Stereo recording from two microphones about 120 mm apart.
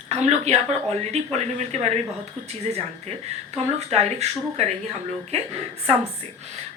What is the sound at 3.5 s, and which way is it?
Speech, 60° right (ahead or behind).